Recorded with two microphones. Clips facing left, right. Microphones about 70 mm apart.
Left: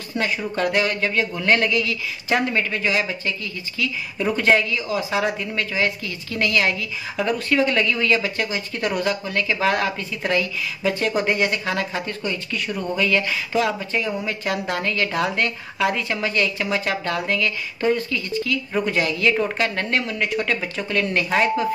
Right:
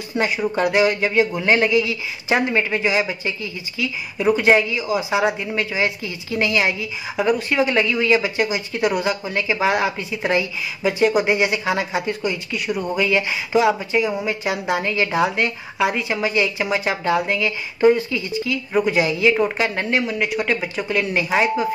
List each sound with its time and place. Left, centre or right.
0.1 s a woman's voice: centre